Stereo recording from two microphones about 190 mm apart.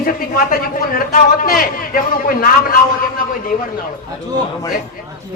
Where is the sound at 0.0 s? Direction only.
50° left (ahead or behind).